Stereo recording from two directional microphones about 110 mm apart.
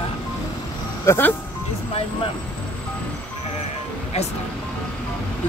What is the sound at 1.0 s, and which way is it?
Speech, 20° left (ahead or behind).